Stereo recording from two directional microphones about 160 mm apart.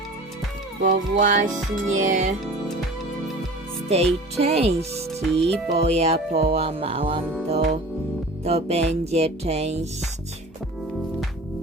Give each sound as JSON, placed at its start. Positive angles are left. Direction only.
{"t": 0.8, "sound": "music", "side_deg": -55}
{"t": 3.8, "sound": "music", "side_deg": -40}
{"t": 5.4, "sound": "music", "side_deg": 0}
{"t": 5.8, "sound": "music", "side_deg": -40}
{"t": 8.4, "sound": "music", "side_deg": -40}